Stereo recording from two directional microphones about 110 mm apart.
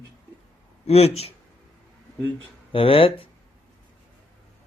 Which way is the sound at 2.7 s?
55° left (ahead or behind).